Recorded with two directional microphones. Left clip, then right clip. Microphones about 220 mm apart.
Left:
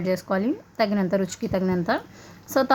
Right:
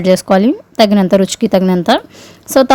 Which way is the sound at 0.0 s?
40° right (ahead or behind).